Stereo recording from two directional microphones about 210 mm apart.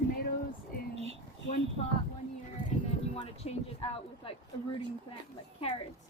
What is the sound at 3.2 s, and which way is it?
Speech, 25° left (ahead or behind).